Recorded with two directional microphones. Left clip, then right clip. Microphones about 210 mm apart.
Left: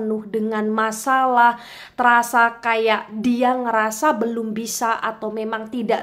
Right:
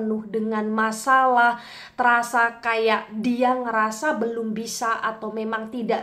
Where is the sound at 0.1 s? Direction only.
25° left (ahead or behind).